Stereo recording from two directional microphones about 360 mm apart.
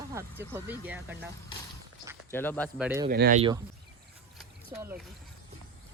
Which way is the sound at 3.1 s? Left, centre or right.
Right.